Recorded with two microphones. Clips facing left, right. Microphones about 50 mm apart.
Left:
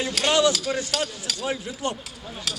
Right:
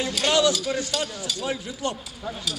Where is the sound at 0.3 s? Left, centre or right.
Left.